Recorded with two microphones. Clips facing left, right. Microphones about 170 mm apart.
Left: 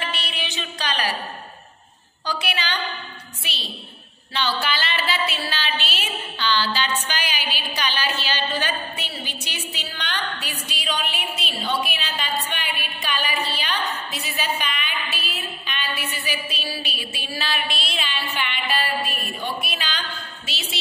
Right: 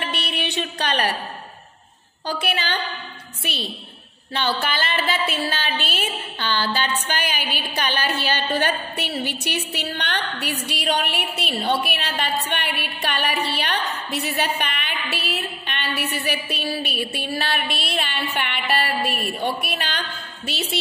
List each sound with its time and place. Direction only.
0.0 s a sound: 60° right (ahead or behind)
2.2 s a woman's voice: 50° right (ahead or behind)
4.3 s a woman's voice: 50° right (ahead or behind)